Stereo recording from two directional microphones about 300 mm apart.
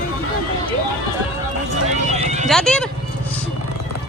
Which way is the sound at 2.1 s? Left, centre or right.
Right.